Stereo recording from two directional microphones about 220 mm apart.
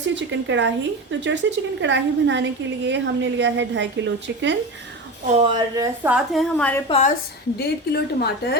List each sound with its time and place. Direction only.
0.1 s a woman's voice: 55° right (ahead or behind)
5.4 s a woman's voice: 20° right (ahead or behind); by 6.8 s 5° left (ahead or behind)
6.8 s a woman's voice: 25° left (ahead or behind)
7.6 s a woman's voice: 45° left (ahead or behind)